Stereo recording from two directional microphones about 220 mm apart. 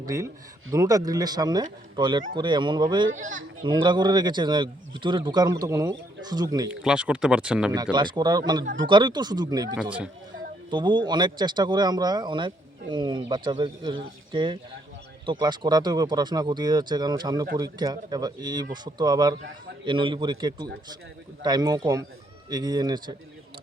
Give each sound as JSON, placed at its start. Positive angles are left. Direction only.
{"t": 0.0, "sound": "speech", "side_deg": -15}
{"t": 6.7, "sound": "speech", "side_deg": -5}
{"t": 7.9, "sound": "speech", "side_deg": -20}
{"t": 10.7, "sound": "speech", "side_deg": -20}